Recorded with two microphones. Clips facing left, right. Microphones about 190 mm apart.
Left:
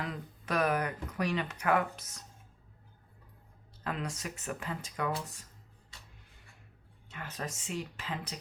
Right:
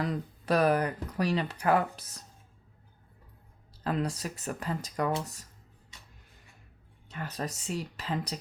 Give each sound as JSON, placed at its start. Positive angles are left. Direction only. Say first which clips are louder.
{"t": 0.0, "sound": "speech", "louder": "right 7 dB", "side_deg": -35}
{"t": 3.8, "sound": "speech", "louder": "right 6 dB", "side_deg": -35}
{"t": 7.1, "sound": "speech", "louder": "right 4 dB", "side_deg": -35}